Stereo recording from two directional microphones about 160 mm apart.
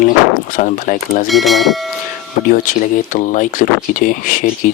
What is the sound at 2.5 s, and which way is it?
Speech, 55° left (ahead or behind).